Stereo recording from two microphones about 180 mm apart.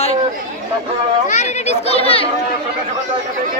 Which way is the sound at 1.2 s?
40° left (ahead or behind).